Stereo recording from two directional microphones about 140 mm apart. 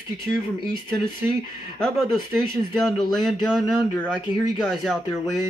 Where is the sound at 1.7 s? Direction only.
5° left (ahead or behind).